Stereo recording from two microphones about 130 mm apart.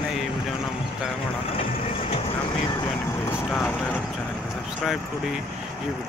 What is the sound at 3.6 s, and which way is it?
Clip-clop, 10° left (ahead or behind).